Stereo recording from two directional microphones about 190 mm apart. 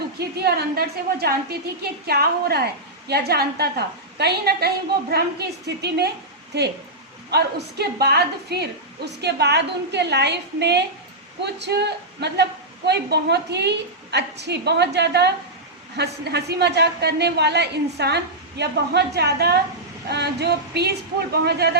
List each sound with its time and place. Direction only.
0.2 s a woman's voice: 55° right (ahead or behind)